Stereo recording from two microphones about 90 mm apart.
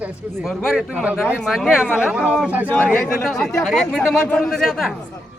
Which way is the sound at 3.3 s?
5° left (ahead or behind).